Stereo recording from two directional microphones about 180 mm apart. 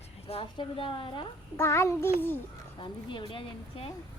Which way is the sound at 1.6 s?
15° left (ahead or behind).